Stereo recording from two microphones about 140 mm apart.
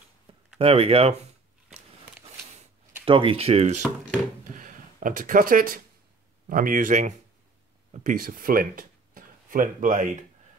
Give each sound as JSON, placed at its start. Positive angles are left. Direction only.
{"t": 0.6, "sound": "speech", "side_deg": -45}
{"t": 3.1, "sound": "speech", "side_deg": -40}
{"t": 4.5, "sound": "a sound", "side_deg": -70}
{"t": 6.5, "sound": "speech", "side_deg": -75}